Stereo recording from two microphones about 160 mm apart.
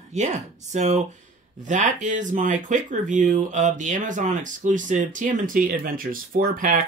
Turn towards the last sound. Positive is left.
turn(degrees=-60)  # may be behind; listen again after turning